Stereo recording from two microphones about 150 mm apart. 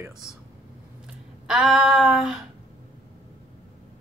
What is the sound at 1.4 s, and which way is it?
Speech, 5° right (ahead or behind).